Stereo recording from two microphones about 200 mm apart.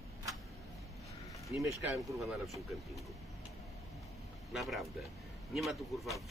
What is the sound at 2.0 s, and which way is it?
Speech, centre (ahead or behind).